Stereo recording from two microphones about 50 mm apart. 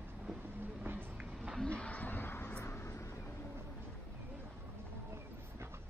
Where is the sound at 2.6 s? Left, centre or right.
Left.